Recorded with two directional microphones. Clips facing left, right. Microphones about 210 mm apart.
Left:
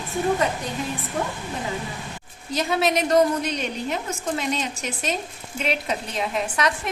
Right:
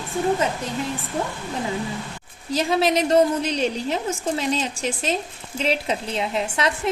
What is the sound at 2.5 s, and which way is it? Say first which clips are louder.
A woman's voice: right 2 dB; 30° right (ahead or behind).